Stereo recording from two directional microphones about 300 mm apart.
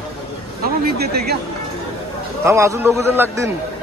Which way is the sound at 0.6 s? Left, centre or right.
Right.